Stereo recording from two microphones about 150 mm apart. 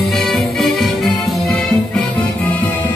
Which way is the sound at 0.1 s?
Centre (ahead or behind).